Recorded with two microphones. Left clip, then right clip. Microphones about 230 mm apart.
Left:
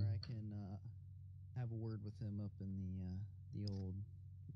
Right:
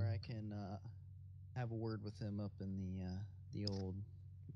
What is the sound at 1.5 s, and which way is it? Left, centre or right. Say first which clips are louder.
Speech: right 6 dB; right.